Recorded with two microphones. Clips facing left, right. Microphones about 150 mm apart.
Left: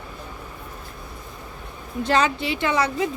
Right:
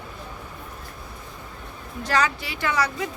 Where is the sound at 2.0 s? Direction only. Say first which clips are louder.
Left 3 dB; 25° left (ahead or behind).